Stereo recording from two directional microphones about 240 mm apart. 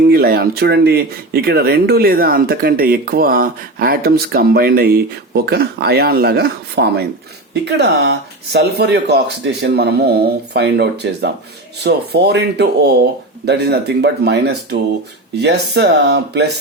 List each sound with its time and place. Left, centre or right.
0.1 s speech: right